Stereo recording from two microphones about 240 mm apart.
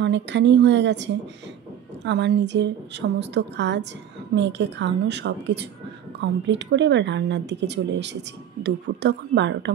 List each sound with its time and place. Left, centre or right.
0.0 s speech: right